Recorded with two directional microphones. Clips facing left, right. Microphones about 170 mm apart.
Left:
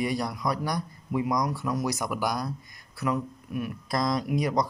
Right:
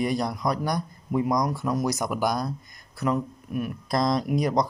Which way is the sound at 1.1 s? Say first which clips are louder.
Right 3 dB; 40° right (ahead or behind).